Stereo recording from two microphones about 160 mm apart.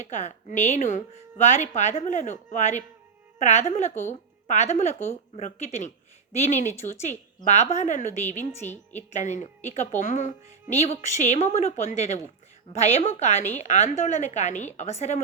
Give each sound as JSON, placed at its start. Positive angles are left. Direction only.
{"t": 0.0, "sound": "a woman's voice", "side_deg": 45}